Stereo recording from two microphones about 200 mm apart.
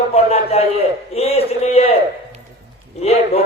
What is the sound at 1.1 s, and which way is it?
Speech, 30° left (ahead or behind).